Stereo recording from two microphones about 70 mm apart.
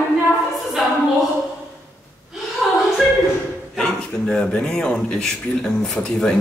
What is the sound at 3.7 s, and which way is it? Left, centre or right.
A man's voice, centre.